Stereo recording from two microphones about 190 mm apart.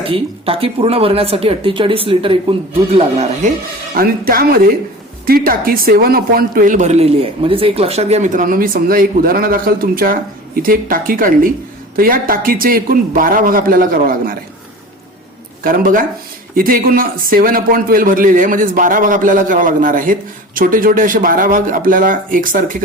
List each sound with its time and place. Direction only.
0.0 s speech: 30° right (ahead or behind)
3.9 s speech: 50° right (ahead or behind)
15.6 s speech: 50° right (ahead or behind)